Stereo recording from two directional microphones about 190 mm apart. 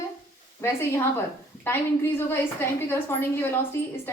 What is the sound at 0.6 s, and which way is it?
A woman's voice, 15° left (ahead or behind).